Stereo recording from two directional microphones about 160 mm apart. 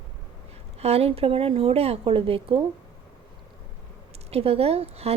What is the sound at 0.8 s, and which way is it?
A woman's voice, 40° right (ahead or behind).